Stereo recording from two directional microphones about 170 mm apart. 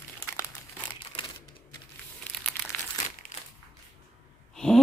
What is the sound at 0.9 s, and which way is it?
Crumpling, 25° left (ahead or behind).